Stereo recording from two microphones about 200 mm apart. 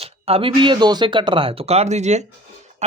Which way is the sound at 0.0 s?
30° right (ahead or behind).